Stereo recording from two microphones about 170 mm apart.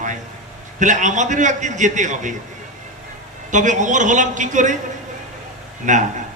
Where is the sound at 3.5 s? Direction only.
45° right (ahead or behind).